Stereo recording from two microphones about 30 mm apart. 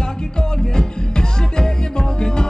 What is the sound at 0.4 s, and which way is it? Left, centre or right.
Music, left.